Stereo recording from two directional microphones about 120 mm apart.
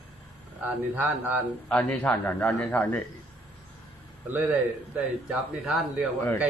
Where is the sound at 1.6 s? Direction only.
10° left (ahead or behind).